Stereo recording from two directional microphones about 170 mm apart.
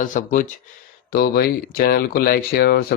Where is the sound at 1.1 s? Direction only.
60° left (ahead or behind).